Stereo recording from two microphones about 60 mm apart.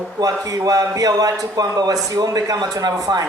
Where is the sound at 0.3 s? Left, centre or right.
Right.